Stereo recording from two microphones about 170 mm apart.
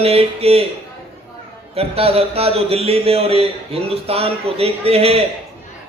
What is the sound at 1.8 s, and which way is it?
Speech, 35° right (ahead or behind).